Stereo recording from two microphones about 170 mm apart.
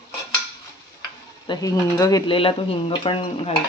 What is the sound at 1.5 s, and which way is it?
Speech, 20° left (ahead or behind).